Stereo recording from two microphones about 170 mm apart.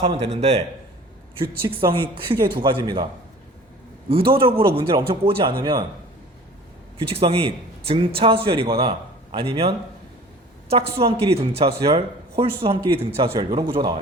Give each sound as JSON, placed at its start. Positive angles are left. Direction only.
{"t": 0.0, "sound": "a man's voice", "side_deg": -35}
{"t": 4.1, "sound": "a man's voice", "side_deg": -30}
{"t": 7.1, "sound": "a man's voice", "side_deg": -30}